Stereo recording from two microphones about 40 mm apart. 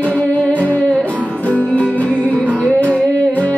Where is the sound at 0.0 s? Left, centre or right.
Left.